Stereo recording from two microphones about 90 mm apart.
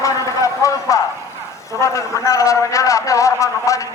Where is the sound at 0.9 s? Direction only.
35° left (ahead or behind).